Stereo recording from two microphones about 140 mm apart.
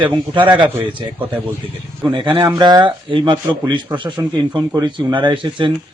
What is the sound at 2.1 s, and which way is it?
A man's voice, 35° right (ahead or behind).